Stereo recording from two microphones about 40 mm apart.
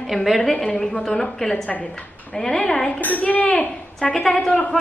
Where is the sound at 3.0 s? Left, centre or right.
Left.